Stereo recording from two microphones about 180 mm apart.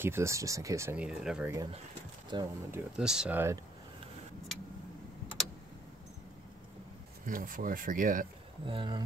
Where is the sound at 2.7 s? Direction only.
5° right (ahead or behind).